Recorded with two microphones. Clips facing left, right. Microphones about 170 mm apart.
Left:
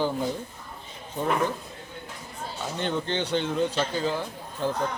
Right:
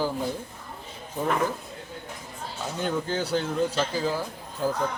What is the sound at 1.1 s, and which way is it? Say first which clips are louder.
Speech: even; 5° right (ahead or behind).